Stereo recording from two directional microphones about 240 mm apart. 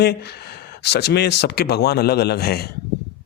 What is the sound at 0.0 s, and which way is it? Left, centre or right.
A man's voice, left.